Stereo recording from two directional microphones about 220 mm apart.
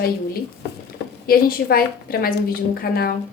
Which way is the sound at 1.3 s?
40° left (ahead or behind).